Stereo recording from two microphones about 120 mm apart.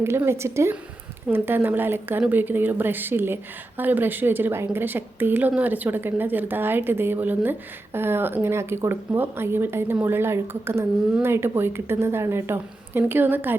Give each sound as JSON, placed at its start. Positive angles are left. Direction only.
{"t": 0.0, "sound": "a woman's voice", "side_deg": -20}